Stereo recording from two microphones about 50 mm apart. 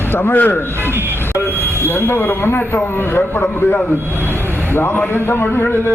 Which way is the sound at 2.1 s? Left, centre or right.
Left.